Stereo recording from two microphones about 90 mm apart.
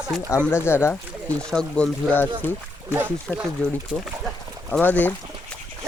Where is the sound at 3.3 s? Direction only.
Centre (ahead or behind).